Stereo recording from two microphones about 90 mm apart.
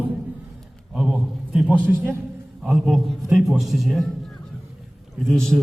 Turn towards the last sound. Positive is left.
turn(degrees=5)  # may be behind; listen again after turning